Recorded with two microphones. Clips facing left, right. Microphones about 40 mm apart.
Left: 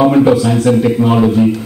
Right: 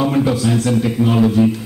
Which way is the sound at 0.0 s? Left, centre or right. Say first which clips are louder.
Left 7 dB; left.